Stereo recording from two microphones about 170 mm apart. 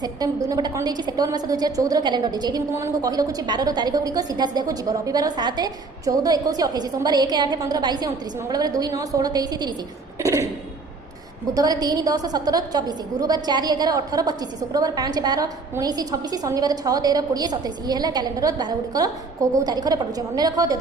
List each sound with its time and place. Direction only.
0.0 s a woman's voice: 20° right (ahead or behind)
10.2 s a sound: 15° right (ahead or behind)
11.5 s a woman's voice: 25° right (ahead or behind)